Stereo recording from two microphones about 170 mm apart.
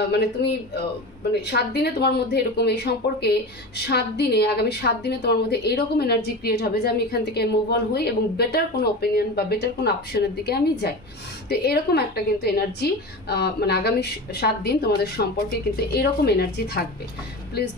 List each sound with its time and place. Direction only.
0.1 s speech: 75° left (ahead or behind)